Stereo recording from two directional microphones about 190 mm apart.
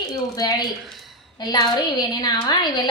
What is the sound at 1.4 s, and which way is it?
A woman's voice, 20° left (ahead or behind).